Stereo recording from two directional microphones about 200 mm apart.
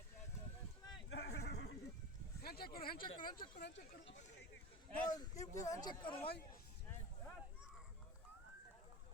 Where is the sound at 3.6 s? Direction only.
60° left (ahead or behind).